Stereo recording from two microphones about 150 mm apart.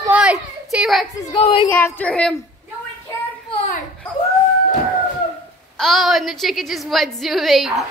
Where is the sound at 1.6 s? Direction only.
10° left (ahead or behind).